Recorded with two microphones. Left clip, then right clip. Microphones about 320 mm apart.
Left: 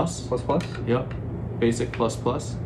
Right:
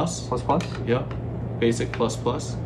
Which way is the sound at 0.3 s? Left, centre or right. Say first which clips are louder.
Right 2 dB; centre.